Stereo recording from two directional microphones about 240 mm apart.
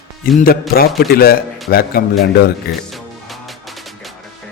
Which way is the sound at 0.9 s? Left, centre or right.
Left.